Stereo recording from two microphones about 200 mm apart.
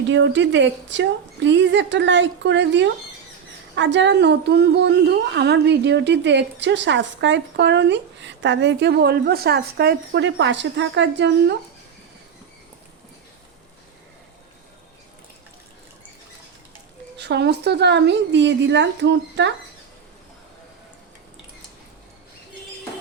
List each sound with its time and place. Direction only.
0.1 s a woman's voice: 65° right (ahead or behind)
17.2 s a woman's voice: 55° right (ahead or behind)